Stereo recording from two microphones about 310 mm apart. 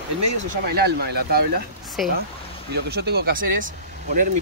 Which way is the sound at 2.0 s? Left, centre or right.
Centre.